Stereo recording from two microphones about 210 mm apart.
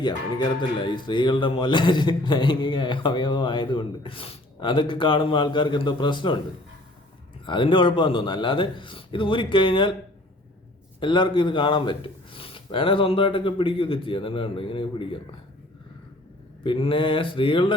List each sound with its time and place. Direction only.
0.0 s speech: 20° left (ahead or behind)
7.4 s speech: 25° left (ahead or behind)
11.0 s speech: 25° left (ahead or behind)
16.6 s speech: 25° left (ahead or behind)